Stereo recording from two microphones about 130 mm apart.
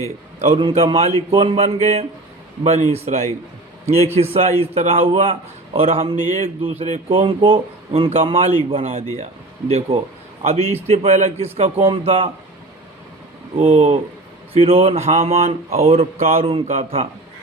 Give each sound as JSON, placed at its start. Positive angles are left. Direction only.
{"t": 0.3, "sound": "a man's voice", "side_deg": -55}
{"t": 13.6, "sound": "speech", "side_deg": -50}